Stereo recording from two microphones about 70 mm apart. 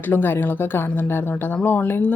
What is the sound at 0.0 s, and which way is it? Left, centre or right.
Speech, left.